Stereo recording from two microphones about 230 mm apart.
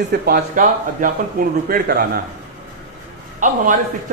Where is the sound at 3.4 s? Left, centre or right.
Right.